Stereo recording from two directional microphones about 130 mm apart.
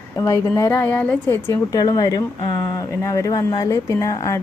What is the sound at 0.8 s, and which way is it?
Speech, 10° left (ahead or behind).